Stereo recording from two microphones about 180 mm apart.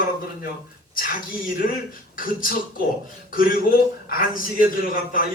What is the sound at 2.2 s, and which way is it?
Speech, 50° left (ahead or behind).